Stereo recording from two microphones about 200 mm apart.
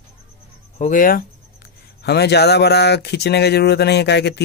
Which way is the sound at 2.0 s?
55° left (ahead or behind).